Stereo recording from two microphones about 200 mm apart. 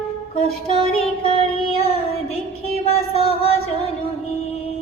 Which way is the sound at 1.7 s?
30° left (ahead or behind).